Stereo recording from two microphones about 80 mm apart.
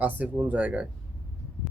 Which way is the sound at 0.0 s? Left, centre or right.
Centre.